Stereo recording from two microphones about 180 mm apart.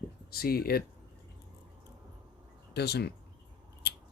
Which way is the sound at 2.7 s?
65° left (ahead or behind).